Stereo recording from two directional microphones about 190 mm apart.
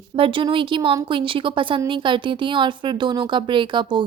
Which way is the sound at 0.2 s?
25° right (ahead or behind).